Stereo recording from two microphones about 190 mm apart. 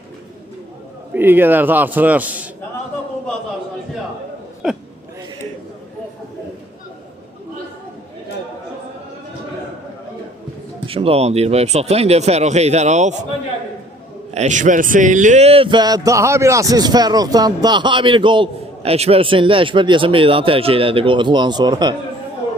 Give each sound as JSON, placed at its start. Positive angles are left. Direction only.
{"t": 1.1, "sound": "a man's voice", "side_deg": -10}
{"t": 4.6, "sound": "hiccup", "side_deg": 0}
{"t": 10.8, "sound": "speech", "side_deg": -30}
{"t": 14.3, "sound": "a man's voice", "side_deg": -40}